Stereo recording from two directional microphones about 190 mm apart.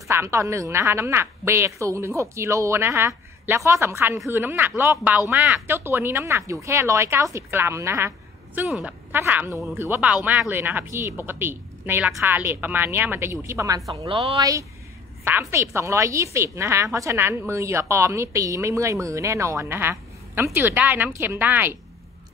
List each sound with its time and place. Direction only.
0.1 s a woman's voice: 15° right (ahead or behind)
14.0 s speech: 30° right (ahead or behind)
14.4 s a woman's voice: 15° right (ahead or behind)